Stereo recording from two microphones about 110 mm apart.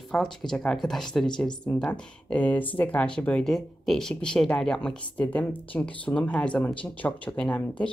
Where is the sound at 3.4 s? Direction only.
5° left (ahead or behind).